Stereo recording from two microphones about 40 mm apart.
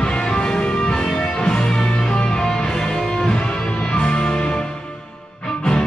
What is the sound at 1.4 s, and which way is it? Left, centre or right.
Music, left.